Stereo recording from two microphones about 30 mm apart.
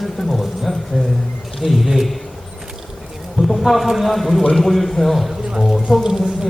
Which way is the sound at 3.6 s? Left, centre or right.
Centre.